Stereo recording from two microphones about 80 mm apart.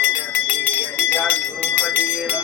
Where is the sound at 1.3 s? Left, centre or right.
Left.